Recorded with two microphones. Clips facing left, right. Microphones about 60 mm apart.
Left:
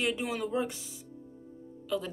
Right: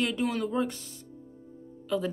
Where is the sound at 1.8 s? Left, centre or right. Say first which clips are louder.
Right 4 dB; centre.